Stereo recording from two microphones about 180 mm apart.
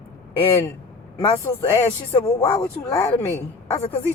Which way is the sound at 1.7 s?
15° left (ahead or behind).